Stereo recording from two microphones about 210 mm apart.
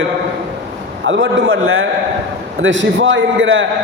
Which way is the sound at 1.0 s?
65° right (ahead or behind).